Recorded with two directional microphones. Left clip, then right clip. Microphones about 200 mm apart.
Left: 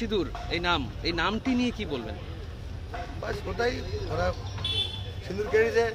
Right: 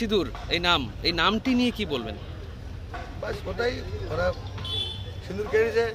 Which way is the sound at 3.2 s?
Centre (ahead or behind).